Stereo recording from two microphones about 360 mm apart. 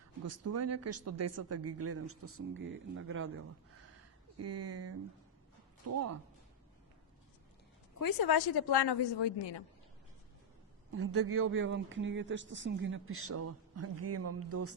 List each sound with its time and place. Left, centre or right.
0.3 s speech: right
4.4 s speech: right
7.9 s a woman's voice: left
11.1 s speech: right